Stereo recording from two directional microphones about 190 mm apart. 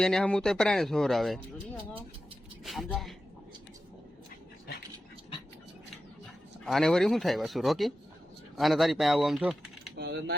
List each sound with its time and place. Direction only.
0.0 s speech: 5° left (ahead or behind)
6.7 s speech: centre (ahead or behind)
10.0 s speech: 65° right (ahead or behind)